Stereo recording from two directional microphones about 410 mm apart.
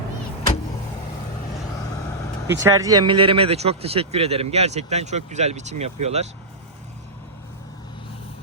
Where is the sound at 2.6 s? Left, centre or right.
Centre.